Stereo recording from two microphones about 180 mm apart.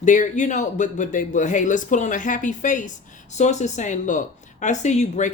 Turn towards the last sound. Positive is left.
turn(degrees=40)  # may be behind; listen again after turning